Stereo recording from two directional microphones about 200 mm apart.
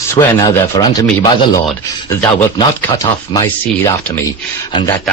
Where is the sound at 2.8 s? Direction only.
20° left (ahead or behind).